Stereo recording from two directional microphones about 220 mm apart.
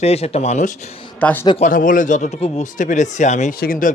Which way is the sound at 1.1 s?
5° left (ahead or behind).